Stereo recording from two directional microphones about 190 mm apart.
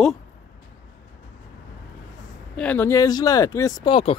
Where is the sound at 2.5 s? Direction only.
10° left (ahead or behind); by 4.1 s 25° left (ahead or behind).